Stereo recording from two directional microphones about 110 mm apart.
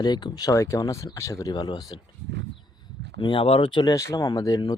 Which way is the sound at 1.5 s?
40° left (ahead or behind).